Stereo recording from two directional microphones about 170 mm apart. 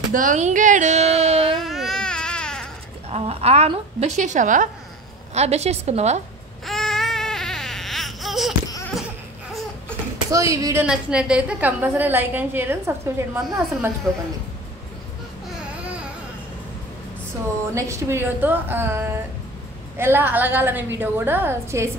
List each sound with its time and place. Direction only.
0.1 s a sound: 50° right (ahead or behind)
1.6 s baby cry: centre (ahead or behind)
3.1 s a woman's voice: 35° right (ahead or behind)
6.6 s baby cry: centre (ahead or behind)
10.3 s a woman's voice: 20° right (ahead or behind)
10.9 s a woman's voice: 5° right (ahead or behind)
14.1 s speech: centre (ahead or behind)
17.7 s a woman's voice: 15° right (ahead or behind)